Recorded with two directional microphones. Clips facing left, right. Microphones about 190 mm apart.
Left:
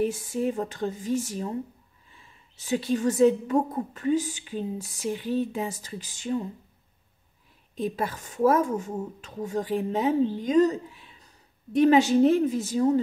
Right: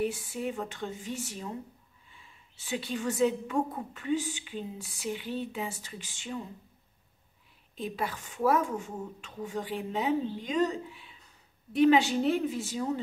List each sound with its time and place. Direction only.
0.0 s a woman's voice: 45° left (ahead or behind)
7.7 s a woman's voice: 45° left (ahead or behind)